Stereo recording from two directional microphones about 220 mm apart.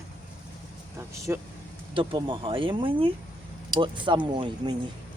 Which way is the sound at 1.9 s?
25° right (ahead or behind).